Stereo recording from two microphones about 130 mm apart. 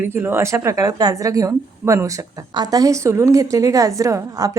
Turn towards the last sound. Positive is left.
turn(degrees=-25)  # may be behind; listen again after turning